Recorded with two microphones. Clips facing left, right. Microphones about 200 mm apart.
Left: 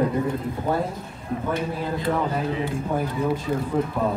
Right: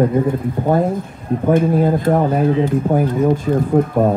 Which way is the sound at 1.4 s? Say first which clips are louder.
Right 14 dB; 50° right (ahead or behind).